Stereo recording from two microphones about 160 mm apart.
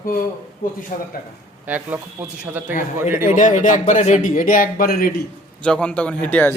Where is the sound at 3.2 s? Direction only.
55° left (ahead or behind).